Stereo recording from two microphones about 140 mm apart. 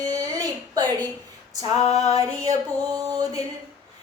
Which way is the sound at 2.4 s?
25° right (ahead or behind).